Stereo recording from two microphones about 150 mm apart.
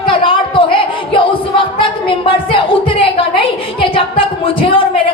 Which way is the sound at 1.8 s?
35° left (ahead or behind).